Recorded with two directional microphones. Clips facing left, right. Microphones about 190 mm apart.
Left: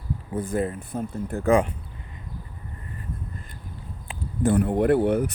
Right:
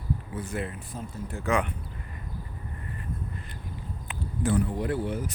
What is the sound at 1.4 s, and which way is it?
Speech, 35° left (ahead or behind).